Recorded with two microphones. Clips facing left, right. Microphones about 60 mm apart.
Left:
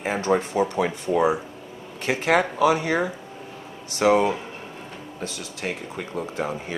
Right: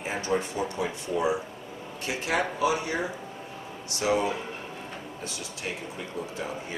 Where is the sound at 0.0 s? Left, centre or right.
Left.